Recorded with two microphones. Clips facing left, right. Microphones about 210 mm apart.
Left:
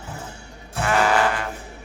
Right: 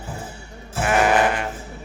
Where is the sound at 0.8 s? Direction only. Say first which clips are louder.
Right 2 dB; 20° right (ahead or behind).